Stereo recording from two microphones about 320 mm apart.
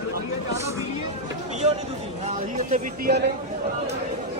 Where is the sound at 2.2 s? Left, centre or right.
Right.